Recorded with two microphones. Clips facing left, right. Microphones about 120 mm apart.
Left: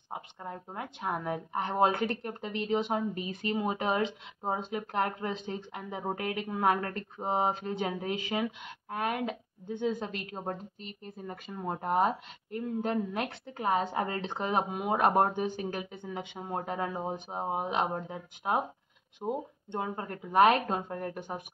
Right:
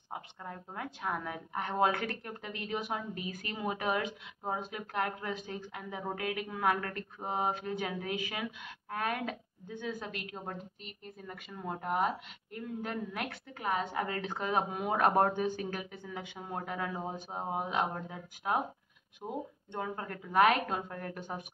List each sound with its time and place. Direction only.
0.1 s a woman's voice: 20° left (ahead or behind)